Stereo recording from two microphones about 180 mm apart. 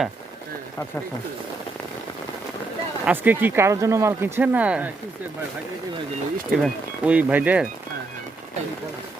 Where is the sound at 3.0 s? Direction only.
10° right (ahead or behind).